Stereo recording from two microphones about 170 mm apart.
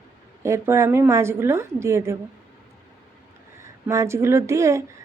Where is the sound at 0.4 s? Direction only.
15° right (ahead or behind).